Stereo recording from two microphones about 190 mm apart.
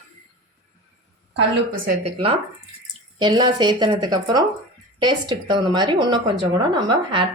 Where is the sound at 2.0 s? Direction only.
30° right (ahead or behind).